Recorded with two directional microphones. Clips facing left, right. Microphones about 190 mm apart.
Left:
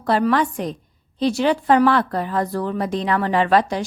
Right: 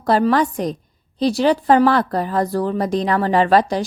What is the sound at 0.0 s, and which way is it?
Speech, 35° right (ahead or behind).